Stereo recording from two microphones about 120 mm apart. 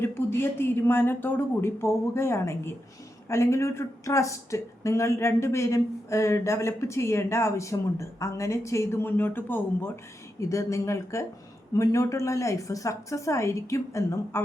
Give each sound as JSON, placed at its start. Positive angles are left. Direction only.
{"t": 0.0, "sound": "speech", "side_deg": 20}